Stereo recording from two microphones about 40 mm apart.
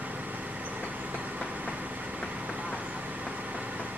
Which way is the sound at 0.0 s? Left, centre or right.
Right.